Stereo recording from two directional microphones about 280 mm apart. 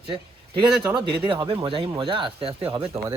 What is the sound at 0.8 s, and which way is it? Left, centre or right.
Speech, centre.